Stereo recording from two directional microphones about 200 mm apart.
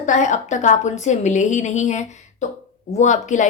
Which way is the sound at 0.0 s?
40° left (ahead or behind).